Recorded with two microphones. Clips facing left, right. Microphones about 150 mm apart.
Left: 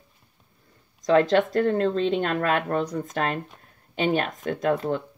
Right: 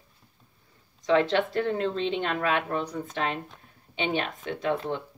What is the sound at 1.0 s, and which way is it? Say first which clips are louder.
Speech: left 4 dB; 40° left (ahead or behind).